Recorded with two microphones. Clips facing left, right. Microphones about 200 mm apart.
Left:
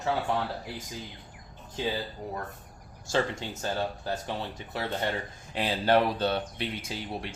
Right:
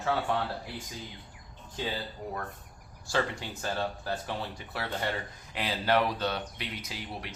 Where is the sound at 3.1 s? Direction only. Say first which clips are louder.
Left 2 dB; 20° left (ahead or behind).